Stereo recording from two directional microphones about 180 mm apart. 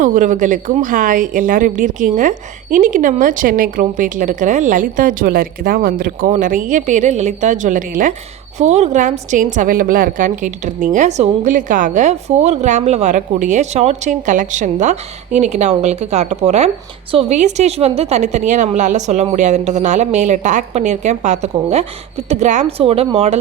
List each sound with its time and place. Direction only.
0.0 s a woman's voice: 45° right (ahead or behind)